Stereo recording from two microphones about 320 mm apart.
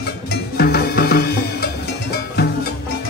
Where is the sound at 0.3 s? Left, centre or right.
Left.